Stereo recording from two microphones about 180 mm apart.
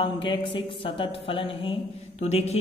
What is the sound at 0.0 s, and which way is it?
Speech, 30° left (ahead or behind).